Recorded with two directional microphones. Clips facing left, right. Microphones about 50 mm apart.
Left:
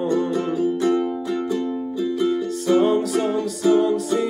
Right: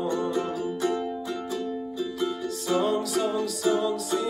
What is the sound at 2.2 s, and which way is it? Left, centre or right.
Music, left.